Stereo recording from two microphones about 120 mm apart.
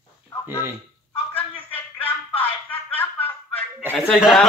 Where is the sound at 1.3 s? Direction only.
15° left (ahead or behind).